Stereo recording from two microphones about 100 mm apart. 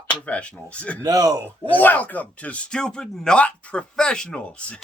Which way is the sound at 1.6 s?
15° left (ahead or behind).